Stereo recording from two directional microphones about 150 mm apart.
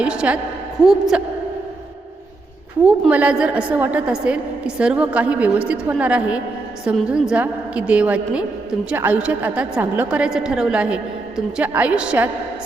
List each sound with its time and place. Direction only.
0.0 s a woman's voice: 5° right (ahead or behind)
3.1 s a woman's voice: 10° right (ahead or behind)